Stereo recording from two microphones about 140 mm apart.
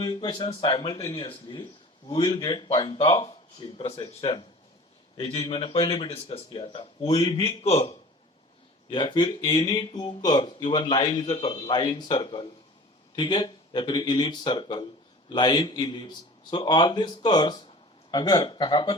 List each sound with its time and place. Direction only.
0.0 s speech: 30° left (ahead or behind); by 7.9 s 45° left (ahead or behind)
8.9 s speech: 35° left (ahead or behind)